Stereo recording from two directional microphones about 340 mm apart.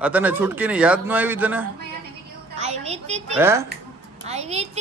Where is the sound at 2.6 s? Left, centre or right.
Centre.